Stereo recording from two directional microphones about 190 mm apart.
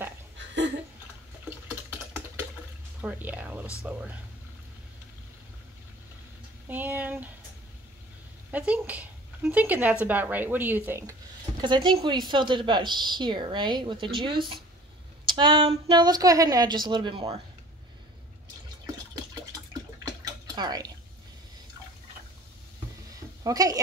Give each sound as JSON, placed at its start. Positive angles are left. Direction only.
{"t": 3.0, "sound": "speech", "side_deg": -10}
{"t": 6.7, "sound": "speech", "side_deg": -10}
{"t": 8.5, "sound": "speech", "side_deg": -5}
{"t": 11.6, "sound": "a woman's voice", "side_deg": -25}
{"t": 20.5, "sound": "a woman's voice", "side_deg": -20}
{"t": 23.4, "sound": "a woman's voice", "side_deg": -20}